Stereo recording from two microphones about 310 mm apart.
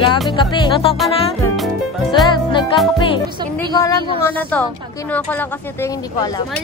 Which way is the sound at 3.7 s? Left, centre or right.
Centre.